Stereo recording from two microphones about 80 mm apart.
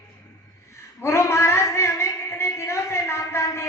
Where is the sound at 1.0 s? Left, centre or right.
Left.